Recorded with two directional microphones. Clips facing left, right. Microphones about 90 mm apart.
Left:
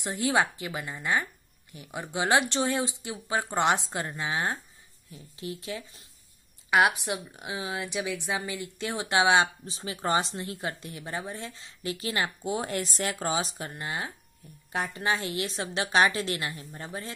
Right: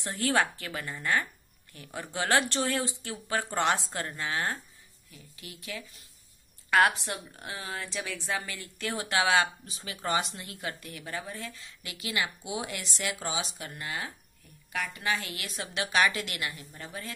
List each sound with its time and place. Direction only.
0.0 s a woman's voice: 15° left (ahead or behind)
6.7 s a woman's voice: 15° left (ahead or behind)